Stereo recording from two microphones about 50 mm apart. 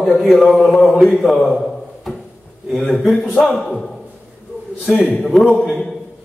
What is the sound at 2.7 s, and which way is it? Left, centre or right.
A man's voice, centre.